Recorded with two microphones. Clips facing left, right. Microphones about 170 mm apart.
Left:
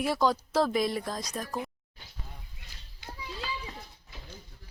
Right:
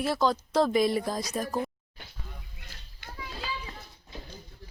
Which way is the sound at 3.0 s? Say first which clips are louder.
Left 1 dB; 55° right (ahead or behind).